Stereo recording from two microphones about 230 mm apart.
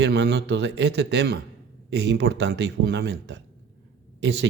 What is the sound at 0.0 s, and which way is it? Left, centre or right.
Speech, right.